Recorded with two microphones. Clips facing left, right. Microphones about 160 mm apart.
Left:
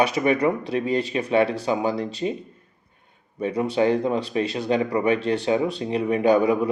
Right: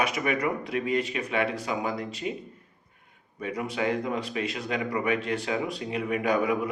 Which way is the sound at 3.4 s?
30° left (ahead or behind).